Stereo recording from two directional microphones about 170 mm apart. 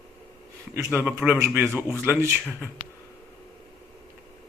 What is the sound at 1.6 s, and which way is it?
Speech, 10° left (ahead or behind).